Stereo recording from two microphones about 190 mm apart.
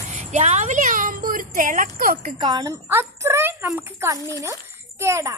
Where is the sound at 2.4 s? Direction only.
20° right (ahead or behind).